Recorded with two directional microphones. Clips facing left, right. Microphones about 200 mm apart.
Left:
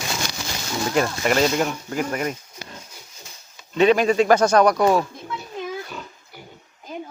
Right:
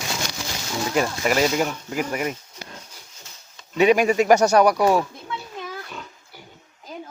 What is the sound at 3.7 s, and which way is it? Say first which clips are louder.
Speech: left 1 dB; 10° right (ahead or behind).